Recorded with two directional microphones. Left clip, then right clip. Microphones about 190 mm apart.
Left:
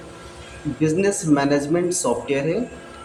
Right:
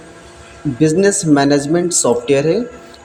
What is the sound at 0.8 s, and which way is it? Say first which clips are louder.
Speech: right 7 dB; 30° right (ahead or behind).